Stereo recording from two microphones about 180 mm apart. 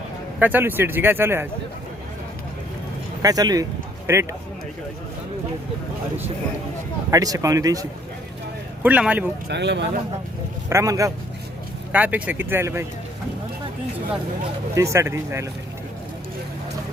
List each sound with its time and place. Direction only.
0.3 s speech: 10° right (ahead or behind)
3.2 s speech: 20° right (ahead or behind)
7.1 s speech: 20° right (ahead or behind)
8.8 s speech: 10° right (ahead or behind)
9.5 s a man's voice: 75° right (ahead or behind)
10.7 s speech: 15° right (ahead or behind)
14.8 s speech: 15° right (ahead or behind)